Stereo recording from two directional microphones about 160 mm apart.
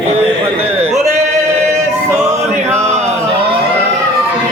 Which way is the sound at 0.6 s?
40° right (ahead or behind).